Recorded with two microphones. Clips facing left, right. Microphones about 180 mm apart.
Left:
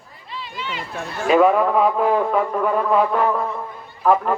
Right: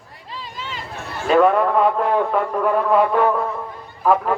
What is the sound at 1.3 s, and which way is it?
A man's voice, 5° left (ahead or behind).